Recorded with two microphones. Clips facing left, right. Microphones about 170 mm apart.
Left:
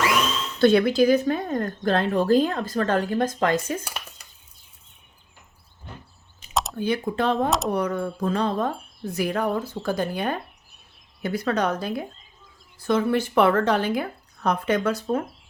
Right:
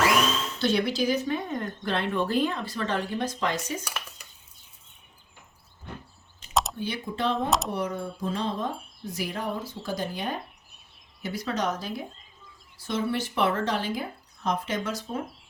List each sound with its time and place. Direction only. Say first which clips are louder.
0.6 s speech: left 9 dB; 55° left (ahead or behind)
6.5 s a sound: even; centre (ahead or behind)
6.7 s speech: left 7 dB; 55° left (ahead or behind)
13.1 s speech: left 6 dB; 55° left (ahead or behind)